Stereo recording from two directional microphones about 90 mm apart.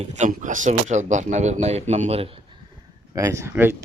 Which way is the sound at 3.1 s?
35° right (ahead or behind).